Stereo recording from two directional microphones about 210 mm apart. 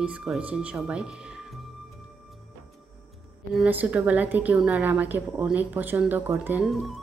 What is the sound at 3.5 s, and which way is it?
A woman's voice, 5° right (ahead or behind).